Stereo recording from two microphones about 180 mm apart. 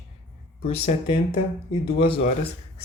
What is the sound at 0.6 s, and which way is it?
Speech, 35° left (ahead or behind).